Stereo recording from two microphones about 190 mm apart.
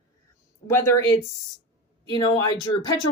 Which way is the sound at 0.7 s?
15° left (ahead or behind).